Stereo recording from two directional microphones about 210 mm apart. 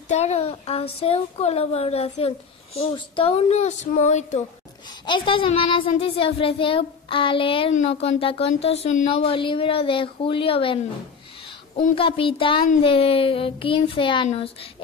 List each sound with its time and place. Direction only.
0.1 s speech: 30° left (ahead or behind)
4.8 s speech: 20° left (ahead or behind)
11.9 s speech: 25° left (ahead or behind)